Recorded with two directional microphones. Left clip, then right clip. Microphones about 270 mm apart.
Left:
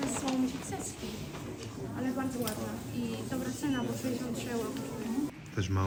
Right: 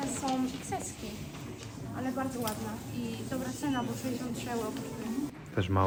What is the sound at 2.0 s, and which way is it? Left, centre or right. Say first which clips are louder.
Speech: right 1 dB; centre.